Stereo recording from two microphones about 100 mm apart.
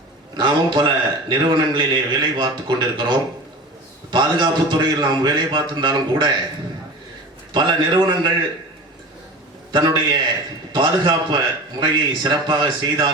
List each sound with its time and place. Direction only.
0.3 s a man's voice: 50° right (ahead or behind)
7.5 s a man's voice: 50° right (ahead or behind)
9.7 s a man's voice: 45° right (ahead or behind)